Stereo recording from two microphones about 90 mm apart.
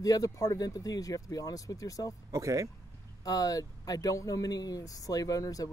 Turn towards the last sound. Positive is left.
turn(degrees=40)  # may be behind; listen again after turning